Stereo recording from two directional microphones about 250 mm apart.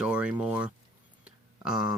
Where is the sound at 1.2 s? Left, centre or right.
Centre.